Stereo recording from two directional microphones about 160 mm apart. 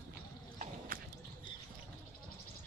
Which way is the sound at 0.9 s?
60° right (ahead or behind).